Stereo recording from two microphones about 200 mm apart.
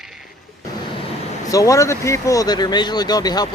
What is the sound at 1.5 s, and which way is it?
Speech, 15° left (ahead or behind).